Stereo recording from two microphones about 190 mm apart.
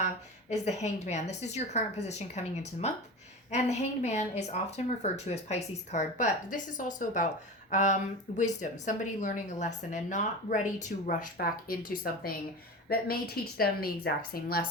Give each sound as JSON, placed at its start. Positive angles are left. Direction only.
{"t": 0.5, "sound": "a woman's voice", "side_deg": 35}